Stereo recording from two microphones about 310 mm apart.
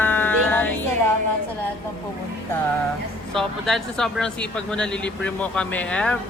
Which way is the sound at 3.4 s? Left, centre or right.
Centre.